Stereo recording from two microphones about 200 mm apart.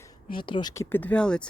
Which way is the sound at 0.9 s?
10° left (ahead or behind).